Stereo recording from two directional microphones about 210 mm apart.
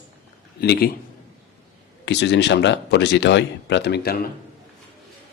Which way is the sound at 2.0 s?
55° left (ahead or behind).